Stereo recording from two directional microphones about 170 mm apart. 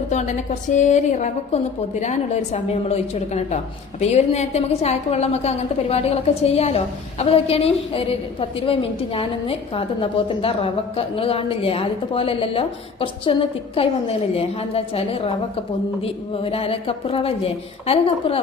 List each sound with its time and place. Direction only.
0.1 s a woman's voice: 45° left (ahead or behind)